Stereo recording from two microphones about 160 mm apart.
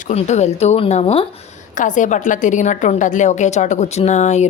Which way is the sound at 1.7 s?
55° left (ahead or behind).